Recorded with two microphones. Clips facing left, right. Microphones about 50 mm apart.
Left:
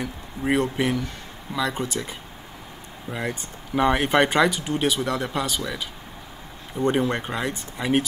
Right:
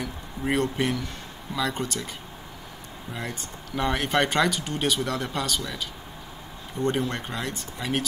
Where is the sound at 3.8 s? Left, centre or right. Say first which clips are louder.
Left 5 dB; centre.